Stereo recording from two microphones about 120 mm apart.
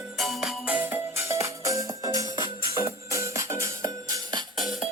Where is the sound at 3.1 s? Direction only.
25° right (ahead or behind).